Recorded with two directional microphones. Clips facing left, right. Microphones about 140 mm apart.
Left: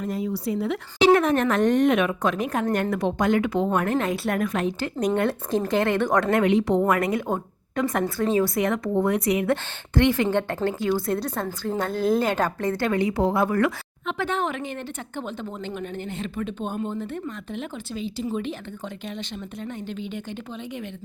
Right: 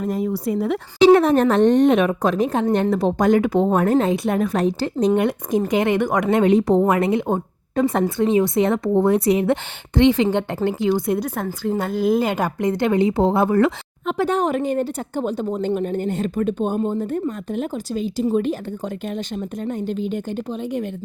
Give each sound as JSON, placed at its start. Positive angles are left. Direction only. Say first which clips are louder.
{"t": 0.0, "sound": "a woman's voice", "louder": "right 5 dB", "side_deg": -45}
{"t": 4.1, "sound": "a woman's voice", "louder": "right 5 dB", "side_deg": -20}
{"t": 4.4, "sound": "a woman's voice", "louder": "right 5 dB", "side_deg": -35}
{"t": 5.1, "sound": "speech", "louder": "right 4 dB", "side_deg": -15}
{"t": 6.5, "sound": "a woman's voice", "louder": "right 5 dB", "side_deg": -40}
{"t": 6.8, "sound": "a woman's voice", "louder": "right 4 dB", "side_deg": -25}
{"t": 14.1, "sound": "a woman's voice", "louder": "right 7 dB", "side_deg": -40}
{"t": 19.6, "sound": "a woman's voice", "louder": "right 9 dB", "side_deg": -45}